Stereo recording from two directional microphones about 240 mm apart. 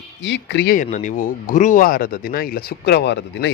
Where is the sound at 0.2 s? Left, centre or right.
Left.